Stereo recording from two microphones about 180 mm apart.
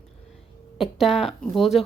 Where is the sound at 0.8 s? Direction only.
Centre (ahead or behind).